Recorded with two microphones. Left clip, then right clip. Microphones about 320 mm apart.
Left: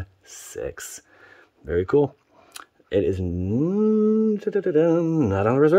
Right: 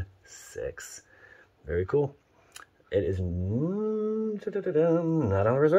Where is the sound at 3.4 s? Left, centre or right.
Left.